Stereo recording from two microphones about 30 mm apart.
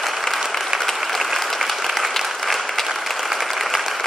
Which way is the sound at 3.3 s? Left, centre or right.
Centre.